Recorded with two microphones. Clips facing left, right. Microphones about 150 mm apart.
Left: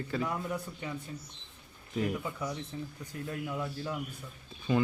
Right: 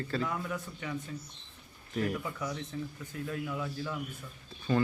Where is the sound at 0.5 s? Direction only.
30° left (ahead or behind).